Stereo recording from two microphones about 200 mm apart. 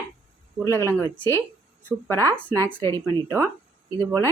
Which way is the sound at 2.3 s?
5° left (ahead or behind).